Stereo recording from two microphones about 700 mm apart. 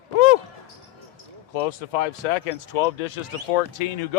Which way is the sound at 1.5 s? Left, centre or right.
Left.